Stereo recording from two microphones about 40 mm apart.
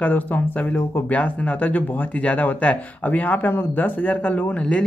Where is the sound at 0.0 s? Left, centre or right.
Left.